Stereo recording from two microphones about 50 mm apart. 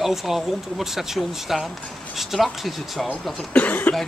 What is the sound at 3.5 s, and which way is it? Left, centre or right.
Cough, left.